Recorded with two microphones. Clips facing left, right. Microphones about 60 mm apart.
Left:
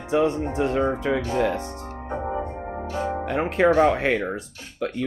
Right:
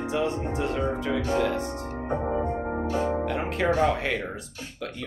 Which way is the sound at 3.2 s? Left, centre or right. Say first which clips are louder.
Left 5 dB; left.